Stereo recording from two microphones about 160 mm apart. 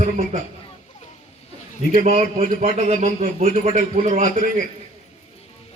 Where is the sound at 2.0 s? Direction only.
45° right (ahead or behind).